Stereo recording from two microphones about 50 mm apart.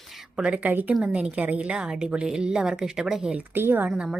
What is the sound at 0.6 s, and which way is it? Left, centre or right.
Speech, right.